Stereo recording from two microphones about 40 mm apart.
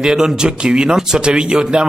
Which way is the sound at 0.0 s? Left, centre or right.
Centre.